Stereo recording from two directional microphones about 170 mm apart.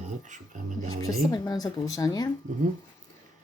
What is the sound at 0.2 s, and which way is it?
Speech, 45° right (ahead or behind).